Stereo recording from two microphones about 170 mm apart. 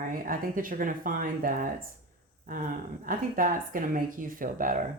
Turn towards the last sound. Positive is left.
turn(degrees=-55)  # may be behind; listen again after turning